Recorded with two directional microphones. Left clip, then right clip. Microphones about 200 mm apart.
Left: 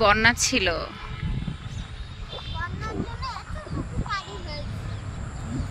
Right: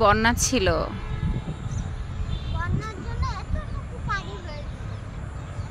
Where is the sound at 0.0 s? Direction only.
15° right (ahead or behind).